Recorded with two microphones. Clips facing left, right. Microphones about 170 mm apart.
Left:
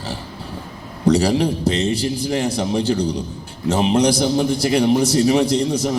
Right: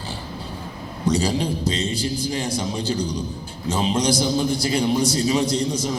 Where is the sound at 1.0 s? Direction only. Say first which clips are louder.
Left 6 dB; 65° left (ahead or behind).